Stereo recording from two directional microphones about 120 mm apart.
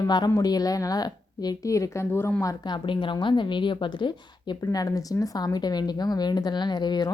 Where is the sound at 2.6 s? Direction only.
40° left (ahead or behind).